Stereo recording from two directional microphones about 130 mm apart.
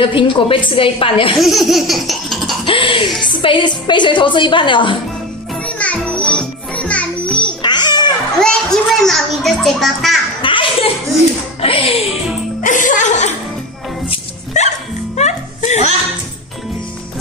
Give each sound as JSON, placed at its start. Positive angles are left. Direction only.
{"t": 0.0, "sound": "a woman's voice", "side_deg": 40}
{"t": 1.4, "sound": "laughter", "side_deg": 0}
{"t": 2.6, "sound": "a sound", "side_deg": 40}
{"t": 3.2, "sound": "a woman's voice", "side_deg": 35}
{"t": 5.7, "sound": "music", "side_deg": 10}
{"t": 7.6, "sound": "music", "side_deg": 35}
{"t": 8.4, "sound": "a sound", "side_deg": 5}
{"t": 10.4, "sound": "a sound", "side_deg": 40}
{"t": 11.6, "sound": "speech", "side_deg": 45}
{"t": 12.6, "sound": "speech", "side_deg": 80}
{"t": 14.5, "sound": "music", "side_deg": 65}